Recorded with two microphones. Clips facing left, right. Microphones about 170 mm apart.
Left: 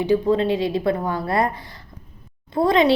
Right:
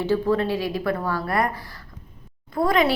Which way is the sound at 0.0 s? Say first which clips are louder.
Left 3 dB; 20° left (ahead or behind).